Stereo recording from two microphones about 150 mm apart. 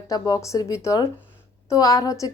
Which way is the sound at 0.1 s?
20° left (ahead or behind).